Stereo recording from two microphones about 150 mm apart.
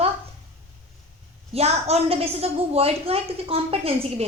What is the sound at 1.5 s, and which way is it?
A woman's voice, 45° right (ahead or behind).